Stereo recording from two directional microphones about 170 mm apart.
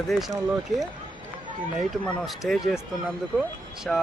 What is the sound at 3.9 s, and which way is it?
Speech, 5° left (ahead or behind).